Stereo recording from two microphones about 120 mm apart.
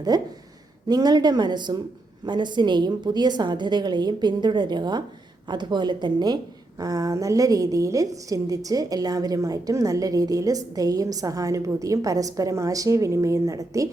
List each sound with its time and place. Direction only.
0.1 s a woman's voice: 35° right (ahead or behind)